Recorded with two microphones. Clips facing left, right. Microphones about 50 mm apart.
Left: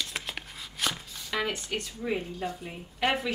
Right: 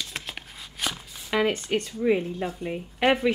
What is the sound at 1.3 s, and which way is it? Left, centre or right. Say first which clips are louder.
Speech: right 7 dB; centre.